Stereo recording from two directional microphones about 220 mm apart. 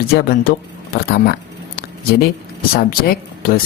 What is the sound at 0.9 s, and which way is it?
Speech, 45° left (ahead or behind).